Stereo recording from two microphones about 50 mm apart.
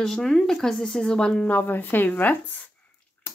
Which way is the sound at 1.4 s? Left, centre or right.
Left.